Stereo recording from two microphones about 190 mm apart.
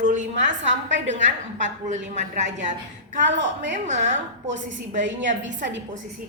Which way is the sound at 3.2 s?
70° right (ahead or behind).